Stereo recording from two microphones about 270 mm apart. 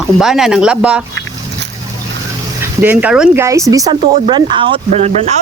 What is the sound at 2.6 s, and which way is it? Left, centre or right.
Speech, centre.